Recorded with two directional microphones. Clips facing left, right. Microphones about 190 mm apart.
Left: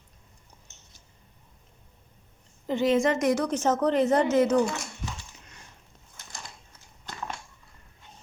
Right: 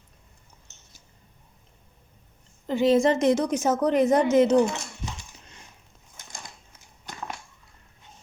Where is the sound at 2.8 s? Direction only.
30° right (ahead or behind).